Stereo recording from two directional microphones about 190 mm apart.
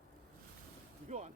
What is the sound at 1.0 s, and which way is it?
Music, 35° right (ahead or behind).